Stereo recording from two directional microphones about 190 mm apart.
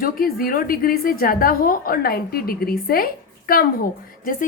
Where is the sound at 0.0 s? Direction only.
50° left (ahead or behind).